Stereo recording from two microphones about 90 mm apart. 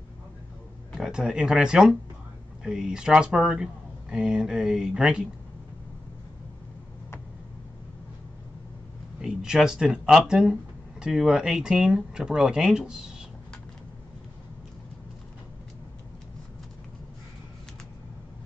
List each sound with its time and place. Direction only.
0.9 s speech: 5° right (ahead or behind)
9.2 s speech: 10° right (ahead or behind)